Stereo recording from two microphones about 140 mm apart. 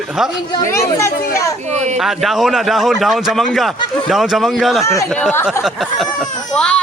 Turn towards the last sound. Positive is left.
turn(degrees=5)  # may be behind; listen again after turning